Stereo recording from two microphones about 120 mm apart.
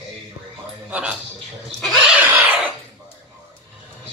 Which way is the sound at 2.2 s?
15° right (ahead or behind).